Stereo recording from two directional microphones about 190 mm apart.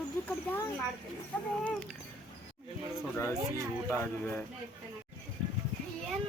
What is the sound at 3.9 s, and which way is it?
Speech, 15° left (ahead or behind).